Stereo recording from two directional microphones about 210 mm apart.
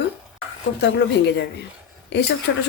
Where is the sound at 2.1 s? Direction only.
55° left (ahead or behind).